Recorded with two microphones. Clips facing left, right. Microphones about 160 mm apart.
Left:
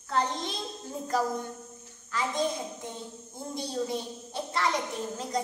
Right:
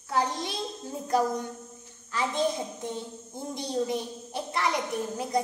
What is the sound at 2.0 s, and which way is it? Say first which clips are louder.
Speech: right 1 dB; 20° right (ahead or behind).